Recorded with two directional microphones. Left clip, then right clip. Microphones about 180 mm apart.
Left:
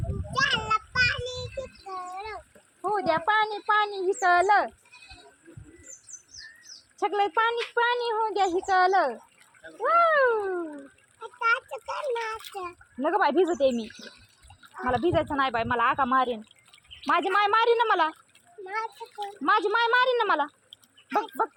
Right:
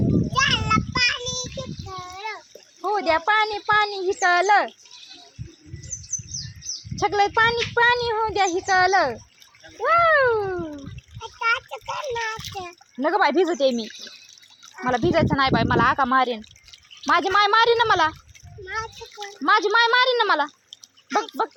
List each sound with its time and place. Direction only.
0.3 s child singing: 15° right (ahead or behind)
1.9 s a sound: 15° right (ahead or behind)
2.8 s speech: 50° right (ahead or behind)
7.0 s speech: 45° right (ahead or behind)
11.2 s speech: 15° right (ahead or behind)
13.0 s speech: 50° right (ahead or behind)
14.8 s speech: 55° right (ahead or behind)
18.6 s a child's voice: 15° left (ahead or behind)
19.4 s speech: 40° right (ahead or behind)